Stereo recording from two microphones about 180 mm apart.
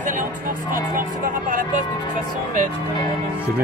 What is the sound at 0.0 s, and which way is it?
Music, 45° right (ahead or behind).